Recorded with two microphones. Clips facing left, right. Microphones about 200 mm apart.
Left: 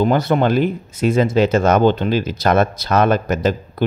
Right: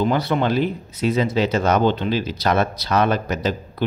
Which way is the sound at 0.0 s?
45° left (ahead or behind).